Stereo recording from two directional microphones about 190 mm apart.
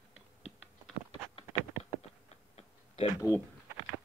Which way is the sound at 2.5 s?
35° left (ahead or behind).